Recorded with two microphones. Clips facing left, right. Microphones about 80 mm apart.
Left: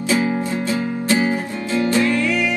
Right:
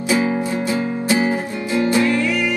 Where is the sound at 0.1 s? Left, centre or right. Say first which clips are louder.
Right 1 dB; right.